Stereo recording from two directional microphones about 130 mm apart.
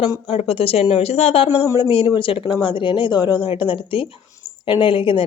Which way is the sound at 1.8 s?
40° left (ahead or behind).